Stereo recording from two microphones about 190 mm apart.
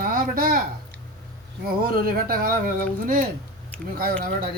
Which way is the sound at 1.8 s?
50° right (ahead or behind).